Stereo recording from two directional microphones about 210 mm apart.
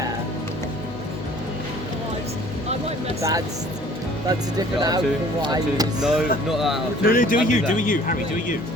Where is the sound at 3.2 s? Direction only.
15° right (ahead or behind).